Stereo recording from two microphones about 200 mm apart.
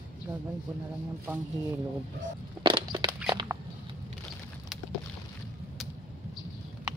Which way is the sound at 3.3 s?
20° right (ahead or behind).